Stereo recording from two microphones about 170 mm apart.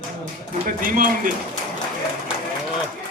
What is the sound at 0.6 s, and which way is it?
Speech, 55° right (ahead or behind).